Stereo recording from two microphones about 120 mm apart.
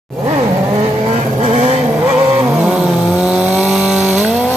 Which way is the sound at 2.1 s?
10° right (ahead or behind).